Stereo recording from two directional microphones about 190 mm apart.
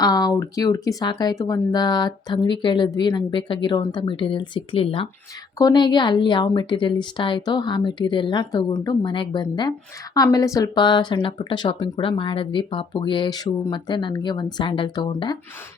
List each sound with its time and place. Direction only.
0.0 s speech: 20° left (ahead or behind)